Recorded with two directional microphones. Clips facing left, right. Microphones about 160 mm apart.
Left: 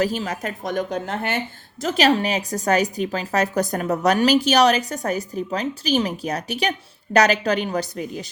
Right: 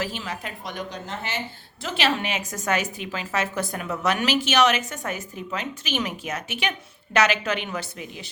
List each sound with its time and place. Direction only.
0.0 s a woman's voice: 40° left (ahead or behind); by 1.4 s 55° left (ahead or behind)
1.8 s a woman's voice: 40° left (ahead or behind)